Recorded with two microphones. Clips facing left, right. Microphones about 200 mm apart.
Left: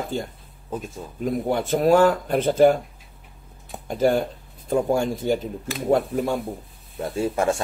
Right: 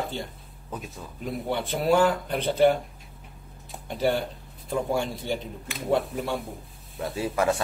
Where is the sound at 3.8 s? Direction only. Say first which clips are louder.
Left 5 dB; 45° left (ahead or behind).